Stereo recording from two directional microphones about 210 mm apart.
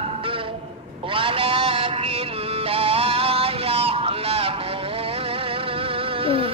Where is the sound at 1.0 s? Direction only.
25° right (ahead or behind).